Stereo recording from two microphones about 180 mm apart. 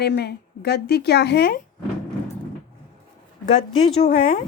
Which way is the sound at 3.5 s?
35° left (ahead or behind).